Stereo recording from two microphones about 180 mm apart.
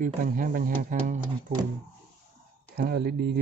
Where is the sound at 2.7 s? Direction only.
60° right (ahead or behind).